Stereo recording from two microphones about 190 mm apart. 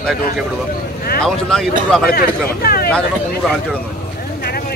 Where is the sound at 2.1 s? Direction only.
55° left (ahead or behind).